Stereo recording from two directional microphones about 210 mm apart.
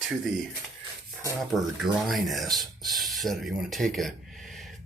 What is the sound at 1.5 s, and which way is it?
Speech, centre (ahead or behind).